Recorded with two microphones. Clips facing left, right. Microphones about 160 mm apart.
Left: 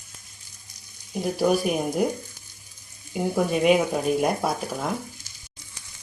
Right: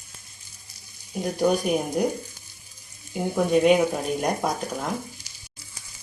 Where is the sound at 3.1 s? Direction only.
5° left (ahead or behind).